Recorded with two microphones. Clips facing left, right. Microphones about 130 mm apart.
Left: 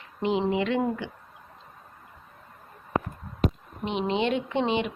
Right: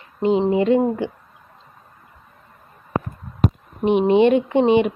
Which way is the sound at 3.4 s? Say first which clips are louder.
Right 8 dB; 55° right (ahead or behind).